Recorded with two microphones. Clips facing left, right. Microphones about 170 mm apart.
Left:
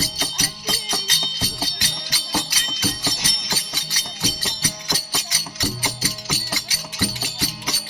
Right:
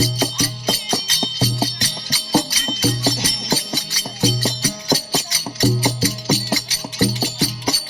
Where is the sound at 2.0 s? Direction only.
35° right (ahead or behind).